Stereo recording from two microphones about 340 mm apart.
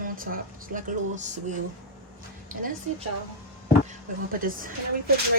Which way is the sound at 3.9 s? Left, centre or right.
Right.